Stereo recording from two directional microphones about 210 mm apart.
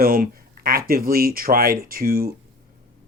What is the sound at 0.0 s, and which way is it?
Speech, 45° right (ahead or behind).